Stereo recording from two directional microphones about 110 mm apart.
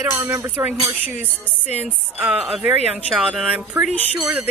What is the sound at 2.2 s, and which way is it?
Speech, 5° right (ahead or behind).